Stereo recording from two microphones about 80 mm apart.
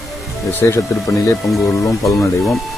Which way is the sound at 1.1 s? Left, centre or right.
Left.